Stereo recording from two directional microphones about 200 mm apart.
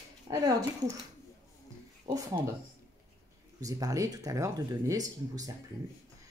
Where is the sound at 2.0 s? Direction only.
15° right (ahead or behind).